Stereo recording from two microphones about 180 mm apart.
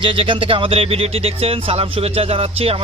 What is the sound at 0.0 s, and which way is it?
Speech, 30° right (ahead or behind).